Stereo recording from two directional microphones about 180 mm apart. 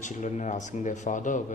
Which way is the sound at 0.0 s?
45° left (ahead or behind).